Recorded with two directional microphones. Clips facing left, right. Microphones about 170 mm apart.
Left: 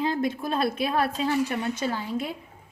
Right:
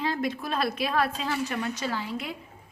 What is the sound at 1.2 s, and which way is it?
A woman's voice, 30° left (ahead or behind).